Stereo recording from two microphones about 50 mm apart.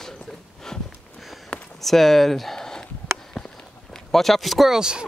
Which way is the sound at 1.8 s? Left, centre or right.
Centre.